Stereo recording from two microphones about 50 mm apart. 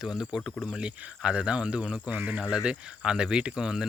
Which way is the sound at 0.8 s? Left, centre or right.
Right.